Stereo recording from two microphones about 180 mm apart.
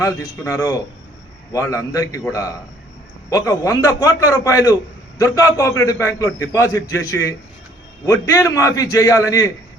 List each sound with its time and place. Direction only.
0.0 s a man's voice: 20° left (ahead or behind)